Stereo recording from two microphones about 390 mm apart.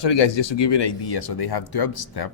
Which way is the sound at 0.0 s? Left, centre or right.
Left.